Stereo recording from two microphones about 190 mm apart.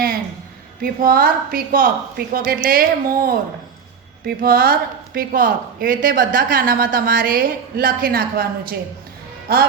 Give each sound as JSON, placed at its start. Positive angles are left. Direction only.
{"t": 0.8, "sound": "speech", "side_deg": -50}
{"t": 9.5, "sound": "speech", "side_deg": -55}